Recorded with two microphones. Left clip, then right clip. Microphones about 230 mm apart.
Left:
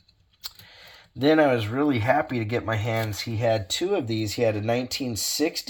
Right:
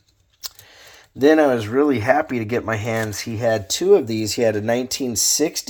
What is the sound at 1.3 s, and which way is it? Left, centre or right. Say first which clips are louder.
Speech: right 3 dB; right.